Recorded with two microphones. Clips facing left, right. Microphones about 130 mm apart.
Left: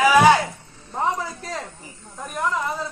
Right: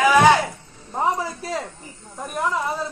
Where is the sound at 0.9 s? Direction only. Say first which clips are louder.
Right 2 dB; 5° right (ahead or behind).